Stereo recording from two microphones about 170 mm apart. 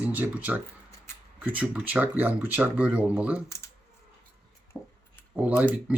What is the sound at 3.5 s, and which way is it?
Computer keyboard, 15° left (ahead or behind).